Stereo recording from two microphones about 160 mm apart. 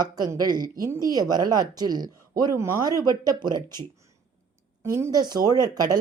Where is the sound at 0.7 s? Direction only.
20° right (ahead or behind).